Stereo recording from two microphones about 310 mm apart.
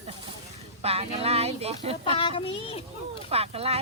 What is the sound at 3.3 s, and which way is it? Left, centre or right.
Speech, centre.